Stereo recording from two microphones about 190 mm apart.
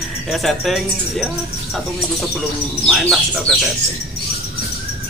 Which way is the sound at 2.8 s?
Centre (ahead or behind).